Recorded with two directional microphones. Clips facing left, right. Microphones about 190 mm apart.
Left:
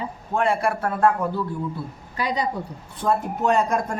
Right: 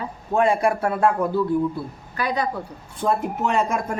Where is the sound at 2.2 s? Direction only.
20° left (ahead or behind).